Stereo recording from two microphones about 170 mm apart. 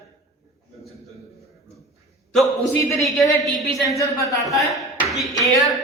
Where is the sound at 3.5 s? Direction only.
Centre (ahead or behind).